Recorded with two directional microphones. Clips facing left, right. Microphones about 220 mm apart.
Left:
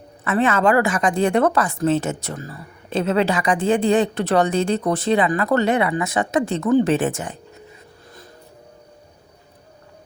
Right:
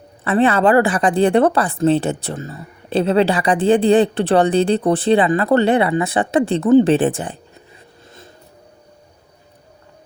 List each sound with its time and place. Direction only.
0.3 s speech: 35° right (ahead or behind)